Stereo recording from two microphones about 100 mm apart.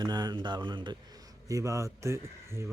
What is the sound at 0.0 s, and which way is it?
Speech, 45° right (ahead or behind).